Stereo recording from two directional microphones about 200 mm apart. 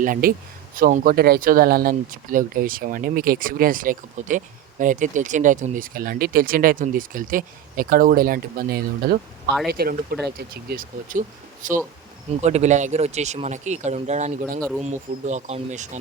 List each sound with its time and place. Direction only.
0.0 s speech: 45° right (ahead or behind)